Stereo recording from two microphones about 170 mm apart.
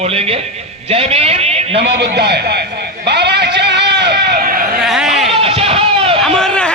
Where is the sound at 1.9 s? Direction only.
80° right.